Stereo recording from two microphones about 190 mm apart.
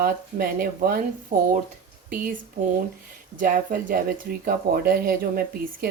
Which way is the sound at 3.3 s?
45° right (ahead or behind).